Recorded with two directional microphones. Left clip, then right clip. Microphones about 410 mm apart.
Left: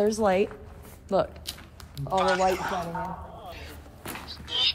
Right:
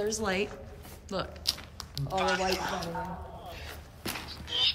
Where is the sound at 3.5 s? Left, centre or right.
Centre.